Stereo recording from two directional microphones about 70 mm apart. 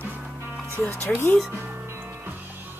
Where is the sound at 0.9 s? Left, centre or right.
Left.